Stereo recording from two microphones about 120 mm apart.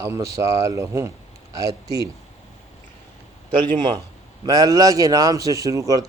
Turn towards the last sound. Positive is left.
turn(degrees=-30)  # may be behind; listen again after turning